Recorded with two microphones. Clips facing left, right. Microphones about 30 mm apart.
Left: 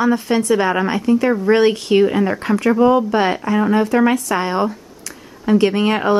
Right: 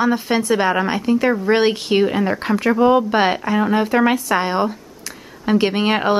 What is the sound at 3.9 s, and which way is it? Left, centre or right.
Speech, centre.